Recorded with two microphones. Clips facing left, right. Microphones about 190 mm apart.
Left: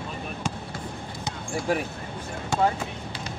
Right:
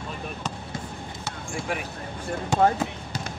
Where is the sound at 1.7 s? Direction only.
35° left (ahead or behind).